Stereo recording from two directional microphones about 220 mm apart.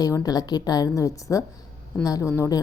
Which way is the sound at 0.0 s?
15° left (ahead or behind).